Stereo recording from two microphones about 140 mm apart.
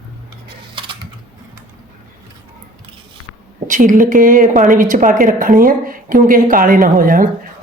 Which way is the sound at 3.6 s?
65° right (ahead or behind).